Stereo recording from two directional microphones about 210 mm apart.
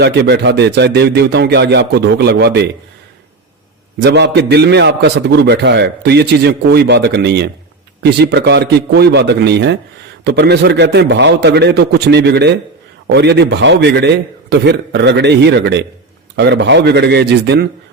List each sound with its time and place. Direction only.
0.0 s a man's voice: 55° right (ahead or behind)
4.0 s a man's voice: 55° right (ahead or behind)